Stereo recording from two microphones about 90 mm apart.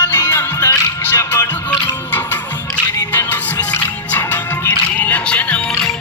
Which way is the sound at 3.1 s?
20° left (ahead or behind).